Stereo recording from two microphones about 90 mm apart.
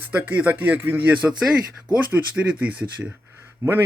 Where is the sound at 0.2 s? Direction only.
20° right (ahead or behind).